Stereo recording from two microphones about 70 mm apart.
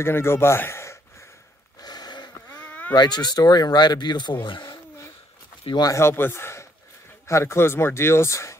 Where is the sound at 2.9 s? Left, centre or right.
Left.